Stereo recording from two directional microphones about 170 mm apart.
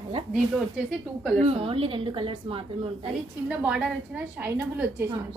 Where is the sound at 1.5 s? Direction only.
35° right (ahead or behind).